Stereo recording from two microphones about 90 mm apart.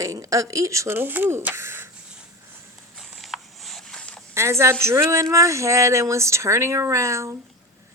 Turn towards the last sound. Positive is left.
turn(degrees=-35)  # may be behind; listen again after turning